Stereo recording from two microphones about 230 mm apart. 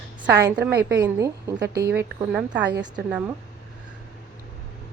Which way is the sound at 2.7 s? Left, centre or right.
Right.